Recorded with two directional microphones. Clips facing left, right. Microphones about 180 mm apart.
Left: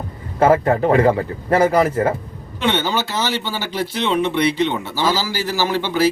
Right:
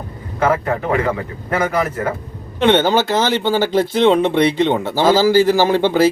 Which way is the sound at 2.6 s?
50° right (ahead or behind).